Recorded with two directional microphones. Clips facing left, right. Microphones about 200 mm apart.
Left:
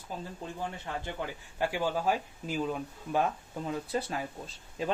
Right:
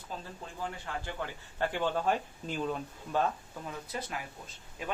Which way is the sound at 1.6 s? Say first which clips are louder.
Left 1 dB; 10° left (ahead or behind).